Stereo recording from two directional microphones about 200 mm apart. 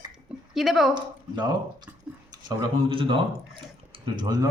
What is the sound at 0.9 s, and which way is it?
Speech, 20° right (ahead or behind).